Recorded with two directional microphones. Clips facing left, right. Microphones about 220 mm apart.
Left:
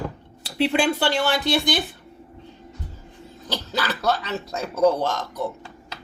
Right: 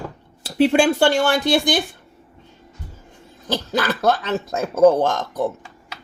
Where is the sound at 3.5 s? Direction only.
50° right (ahead or behind).